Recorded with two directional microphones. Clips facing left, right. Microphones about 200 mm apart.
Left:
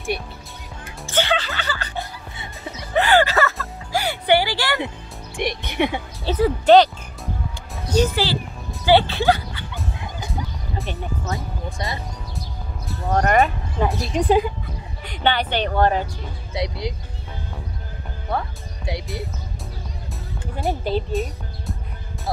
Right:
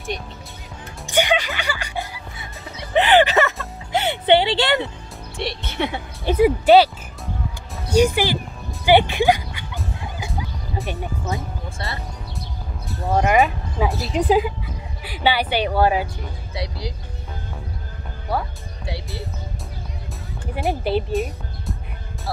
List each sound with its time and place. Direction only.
1.0 s music: 15° right (ahead or behind)
2.8 s a sound: 20° right (ahead or behind)
3.9 s music: 25° right (ahead or behind)
4.8 s speech: 15° left (ahead or behind)
6.2 s speech: 15° right (ahead or behind)
7.9 s speech: 15° right (ahead or behind)
9.8 s fowl: centre (ahead or behind)
10.9 s speech: 15° right (ahead or behind)
11.8 s speech: 15° left (ahead or behind)
12.8 s speech: 5° right (ahead or behind)
16.5 s speech: 20° left (ahead or behind)
18.9 s speech: 20° left (ahead or behind)
20.6 s speech: 5° right (ahead or behind)